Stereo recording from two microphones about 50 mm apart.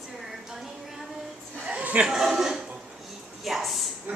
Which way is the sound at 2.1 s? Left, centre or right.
Centre.